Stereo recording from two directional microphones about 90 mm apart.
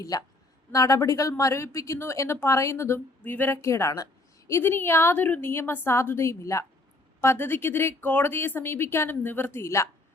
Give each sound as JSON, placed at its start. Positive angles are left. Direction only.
{"t": 0.0, "sound": "a woman's voice", "side_deg": 40}